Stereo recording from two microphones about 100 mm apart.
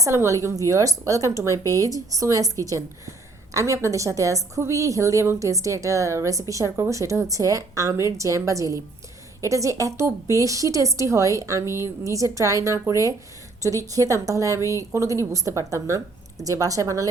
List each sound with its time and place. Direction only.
0.0 s a woman's voice: 30° right (ahead or behind)